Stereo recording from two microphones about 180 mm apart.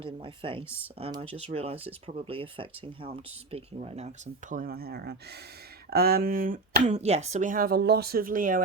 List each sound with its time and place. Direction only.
0.0 s speech: 30° right (ahead or behind); by 8.6 s 50° right (ahead or behind)